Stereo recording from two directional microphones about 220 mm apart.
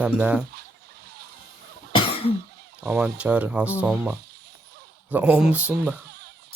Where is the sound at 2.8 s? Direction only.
5° right (ahead or behind).